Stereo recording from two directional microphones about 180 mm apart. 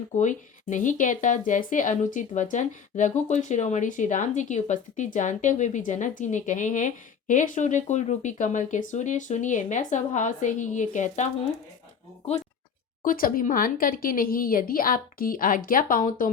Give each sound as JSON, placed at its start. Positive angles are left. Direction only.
{"t": 0.1, "sound": "speech", "side_deg": 45}
{"t": 13.1, "sound": "speech", "side_deg": 50}